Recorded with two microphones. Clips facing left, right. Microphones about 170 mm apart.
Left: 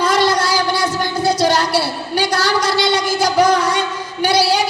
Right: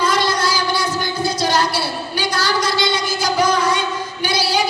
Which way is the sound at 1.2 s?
75° left (ahead or behind).